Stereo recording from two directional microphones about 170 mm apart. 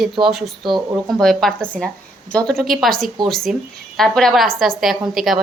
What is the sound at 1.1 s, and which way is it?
A woman's voice, centre (ahead or behind).